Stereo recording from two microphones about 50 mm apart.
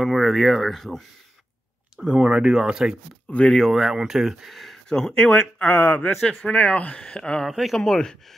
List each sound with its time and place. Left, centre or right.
0.0 s speech: centre
2.2 s speech: centre
3.3 s speech: left
3.7 s speech: centre
5.7 s speech: left
6.4 s speech: left
7.4 s speech: centre